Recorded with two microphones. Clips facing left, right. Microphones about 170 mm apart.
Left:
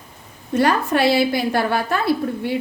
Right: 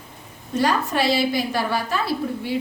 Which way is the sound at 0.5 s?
60° left (ahead or behind).